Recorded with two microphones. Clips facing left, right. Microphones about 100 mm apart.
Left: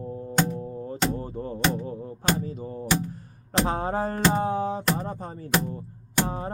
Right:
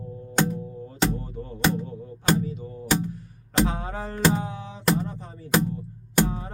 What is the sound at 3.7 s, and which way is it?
Music, 40° left (ahead or behind).